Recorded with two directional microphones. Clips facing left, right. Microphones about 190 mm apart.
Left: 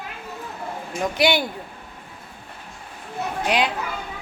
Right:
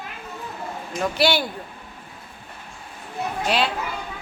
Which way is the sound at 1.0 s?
20° left (ahead or behind).